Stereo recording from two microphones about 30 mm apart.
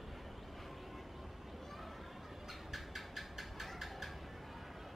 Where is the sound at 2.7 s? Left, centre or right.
Centre.